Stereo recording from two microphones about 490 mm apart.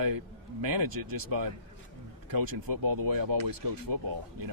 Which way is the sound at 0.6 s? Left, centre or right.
Right.